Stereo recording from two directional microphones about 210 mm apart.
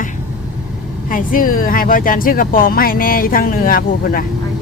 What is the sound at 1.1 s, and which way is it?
Speech, 40° left (ahead or behind).